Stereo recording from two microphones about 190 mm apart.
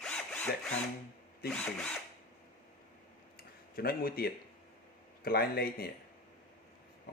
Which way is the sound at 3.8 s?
50° left (ahead or behind).